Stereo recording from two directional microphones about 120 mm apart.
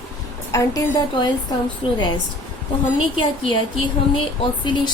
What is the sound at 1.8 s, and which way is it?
Speech, 45° left (ahead or behind).